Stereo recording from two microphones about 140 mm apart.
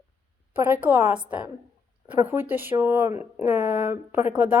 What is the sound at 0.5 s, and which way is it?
Speech, 15° right (ahead or behind).